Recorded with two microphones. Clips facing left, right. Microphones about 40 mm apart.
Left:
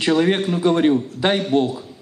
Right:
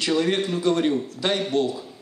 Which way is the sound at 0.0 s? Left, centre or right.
Left.